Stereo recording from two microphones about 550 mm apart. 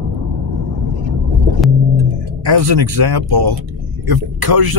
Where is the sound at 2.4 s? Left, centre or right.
Right.